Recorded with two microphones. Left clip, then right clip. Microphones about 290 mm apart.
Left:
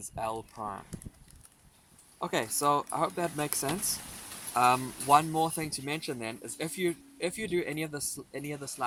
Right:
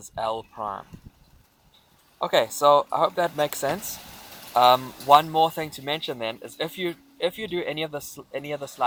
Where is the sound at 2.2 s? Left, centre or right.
Centre.